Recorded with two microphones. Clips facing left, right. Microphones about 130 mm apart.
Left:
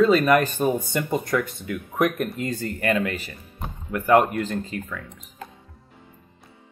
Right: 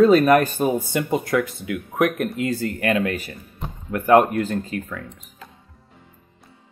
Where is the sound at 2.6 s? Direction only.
45° right (ahead or behind).